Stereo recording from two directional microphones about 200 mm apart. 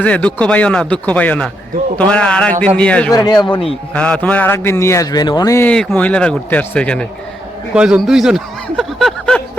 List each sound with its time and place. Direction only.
0.0 s a man's voice: 5° left (ahead or behind)
3.1 s speech: 20° left (ahead or behind)
3.9 s a man's voice: 5° left (ahead or behind)